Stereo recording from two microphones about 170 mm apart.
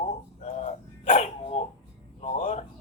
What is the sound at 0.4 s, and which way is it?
Dog, 45° left (ahead or behind).